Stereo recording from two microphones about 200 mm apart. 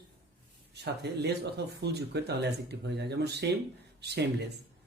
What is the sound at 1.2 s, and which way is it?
Speech, 55° right (ahead or behind).